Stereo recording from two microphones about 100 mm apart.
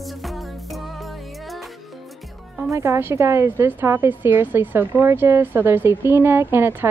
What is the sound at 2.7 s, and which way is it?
A woman's voice, 30° right (ahead or behind).